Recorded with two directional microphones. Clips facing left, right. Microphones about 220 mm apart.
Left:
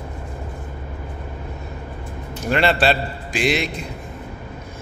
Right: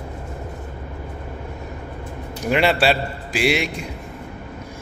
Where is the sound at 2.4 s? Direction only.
10° right (ahead or behind).